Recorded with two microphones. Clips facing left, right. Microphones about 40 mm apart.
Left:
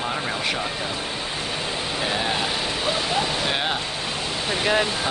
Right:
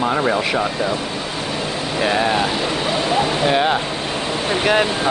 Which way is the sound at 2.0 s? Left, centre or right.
Right.